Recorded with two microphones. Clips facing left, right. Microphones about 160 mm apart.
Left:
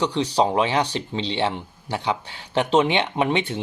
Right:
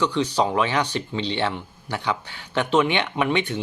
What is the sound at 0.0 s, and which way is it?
Speech, 30° left (ahead or behind).